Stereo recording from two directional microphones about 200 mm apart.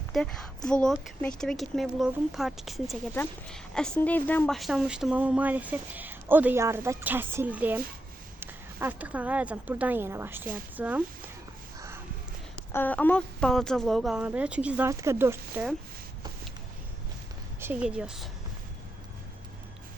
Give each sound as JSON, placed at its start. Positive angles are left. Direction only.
{"t": 0.1, "sound": "speech", "side_deg": 5}
{"t": 12.7, "sound": "speech", "side_deg": 10}
{"t": 17.6, "sound": "speech", "side_deg": -10}